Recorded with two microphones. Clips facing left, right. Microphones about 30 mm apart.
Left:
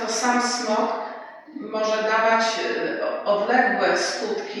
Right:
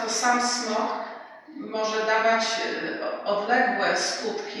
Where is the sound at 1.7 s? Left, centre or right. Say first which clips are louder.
Left 2 dB; centre.